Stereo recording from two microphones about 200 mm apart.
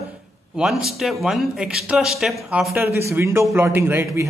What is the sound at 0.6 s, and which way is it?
Speech, centre (ahead or behind).